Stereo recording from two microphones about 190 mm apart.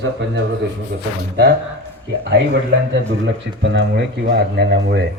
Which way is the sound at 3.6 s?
65° right (ahead or behind).